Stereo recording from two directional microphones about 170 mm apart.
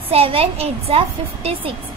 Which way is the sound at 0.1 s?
35° right (ahead or behind).